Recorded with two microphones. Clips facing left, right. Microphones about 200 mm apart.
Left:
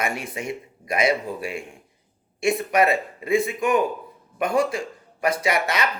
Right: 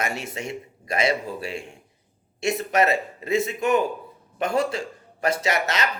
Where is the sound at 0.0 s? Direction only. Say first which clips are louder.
Left 1 dB; 25° right (ahead or behind).